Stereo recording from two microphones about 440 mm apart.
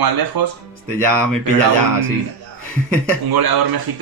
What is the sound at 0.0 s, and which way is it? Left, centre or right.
Speech, right.